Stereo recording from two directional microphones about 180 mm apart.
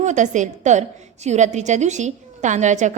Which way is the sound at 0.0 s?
45° right (ahead or behind).